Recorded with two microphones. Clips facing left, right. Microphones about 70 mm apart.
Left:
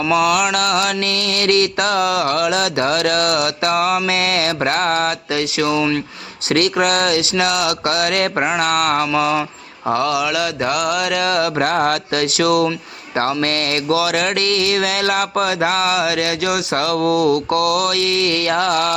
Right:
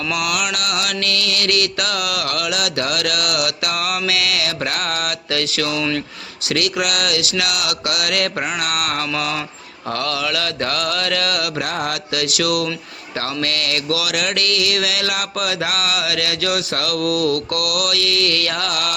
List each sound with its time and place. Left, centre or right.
0.1 s mantra: left
6.5 s mantra: left
9.1 s mantra: left
11.5 s mantra: left
12.2 s mantra: left